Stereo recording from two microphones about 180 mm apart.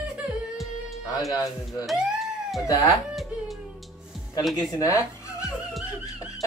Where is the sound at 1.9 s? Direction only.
Centre (ahead or behind).